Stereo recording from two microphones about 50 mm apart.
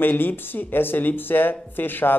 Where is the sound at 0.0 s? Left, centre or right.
Left.